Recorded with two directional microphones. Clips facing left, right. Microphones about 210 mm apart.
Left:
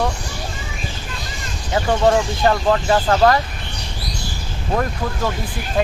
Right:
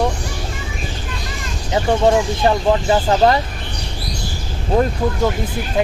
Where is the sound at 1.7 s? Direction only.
15° right (ahead or behind).